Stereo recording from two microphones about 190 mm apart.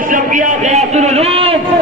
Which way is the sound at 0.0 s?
45° right (ahead or behind).